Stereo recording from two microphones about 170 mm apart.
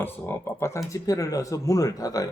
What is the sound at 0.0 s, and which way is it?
Speech, 10° left (ahead or behind).